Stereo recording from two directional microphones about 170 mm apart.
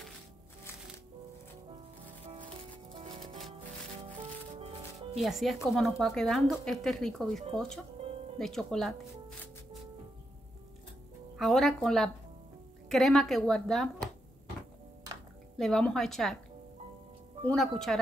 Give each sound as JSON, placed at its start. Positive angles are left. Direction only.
{"t": 2.2, "sound": "music", "side_deg": -35}
{"t": 4.6, "sound": "music", "side_deg": -35}
{"t": 5.2, "sound": "speech", "side_deg": 0}
{"t": 11.3, "sound": "speech", "side_deg": 0}
{"t": 15.5, "sound": "speech", "side_deg": 0}
{"t": 17.5, "sound": "speech", "side_deg": 0}